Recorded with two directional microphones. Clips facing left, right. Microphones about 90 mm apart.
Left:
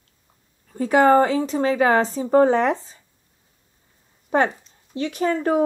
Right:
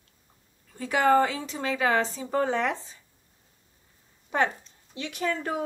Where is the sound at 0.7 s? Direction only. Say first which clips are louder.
Left 6 dB; 40° left (ahead or behind).